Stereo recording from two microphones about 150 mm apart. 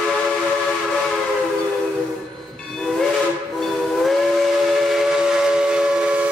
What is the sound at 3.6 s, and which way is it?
Steam whistle, centre (ahead or behind).